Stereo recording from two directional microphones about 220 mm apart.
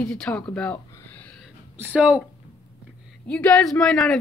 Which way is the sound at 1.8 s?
5° right (ahead or behind).